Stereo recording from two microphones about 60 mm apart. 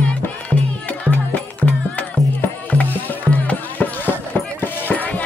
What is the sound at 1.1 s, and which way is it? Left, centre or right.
Music, left.